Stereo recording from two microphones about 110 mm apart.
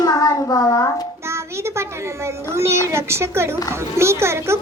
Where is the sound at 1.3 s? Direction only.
25° right (ahead or behind).